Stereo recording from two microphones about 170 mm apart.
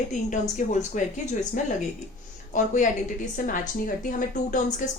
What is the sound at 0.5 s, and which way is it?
Speech, 45° left (ahead or behind).